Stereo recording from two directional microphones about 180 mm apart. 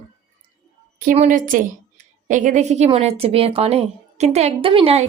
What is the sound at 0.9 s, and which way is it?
A woman's voice, 45° right (ahead or behind).